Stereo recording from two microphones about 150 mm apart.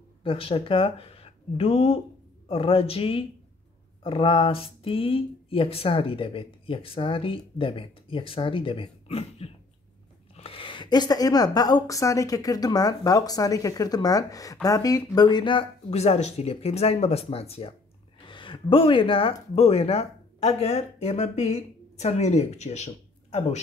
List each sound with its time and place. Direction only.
0.2 s a woman's voice: 35° left (ahead or behind)
15.9 s speech: 45° left (ahead or behind)